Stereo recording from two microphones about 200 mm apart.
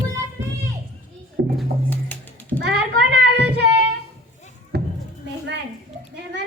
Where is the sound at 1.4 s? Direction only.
60° right (ahead or behind).